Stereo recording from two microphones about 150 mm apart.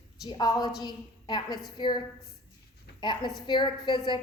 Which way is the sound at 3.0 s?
30° left (ahead or behind).